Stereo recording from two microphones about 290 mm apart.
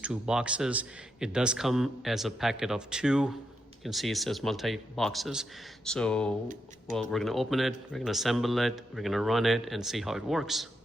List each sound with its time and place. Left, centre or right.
0.0 s speech: centre